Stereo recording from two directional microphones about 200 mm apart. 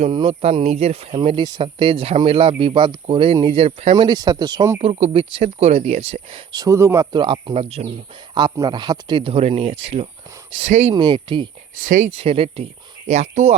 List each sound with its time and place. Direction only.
0.0 s speech: 25° right (ahead or behind)
4.8 s speech: 30° right (ahead or behind)
8.4 s speech: 20° right (ahead or behind)
11.7 s speech: 40° right (ahead or behind)